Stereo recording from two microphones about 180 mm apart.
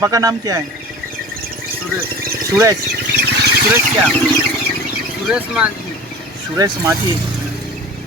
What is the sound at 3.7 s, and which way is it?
Speech, 15° right (ahead or behind).